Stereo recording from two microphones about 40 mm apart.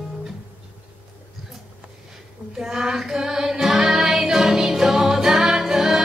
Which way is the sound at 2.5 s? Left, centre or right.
Centre.